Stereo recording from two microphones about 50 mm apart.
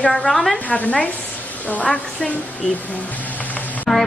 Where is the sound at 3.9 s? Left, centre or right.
Centre.